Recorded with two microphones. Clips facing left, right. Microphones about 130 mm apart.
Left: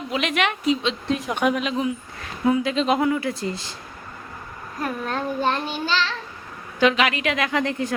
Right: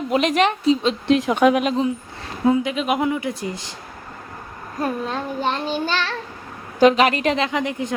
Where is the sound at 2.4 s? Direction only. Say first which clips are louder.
Right 2 dB; 25° right (ahead or behind).